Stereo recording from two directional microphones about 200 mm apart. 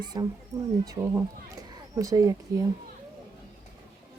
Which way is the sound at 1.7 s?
15° right (ahead or behind).